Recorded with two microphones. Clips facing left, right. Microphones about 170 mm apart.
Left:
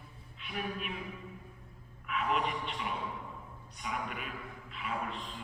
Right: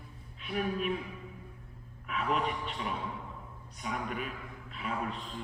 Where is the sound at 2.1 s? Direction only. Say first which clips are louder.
Right 1 dB; 40° right (ahead or behind).